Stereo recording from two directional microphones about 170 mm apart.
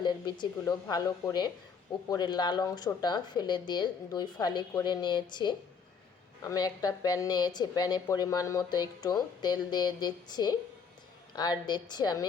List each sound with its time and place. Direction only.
0.0 s a woman's voice: 25° left (ahead or behind)